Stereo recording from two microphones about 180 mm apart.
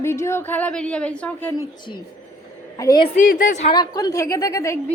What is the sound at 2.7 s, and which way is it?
Speech, 20° left (ahead or behind).